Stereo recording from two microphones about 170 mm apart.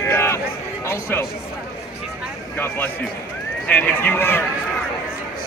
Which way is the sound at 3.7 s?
10° left (ahead or behind).